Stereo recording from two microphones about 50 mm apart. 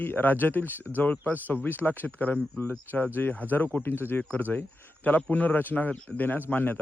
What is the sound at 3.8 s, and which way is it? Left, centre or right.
Speech, left.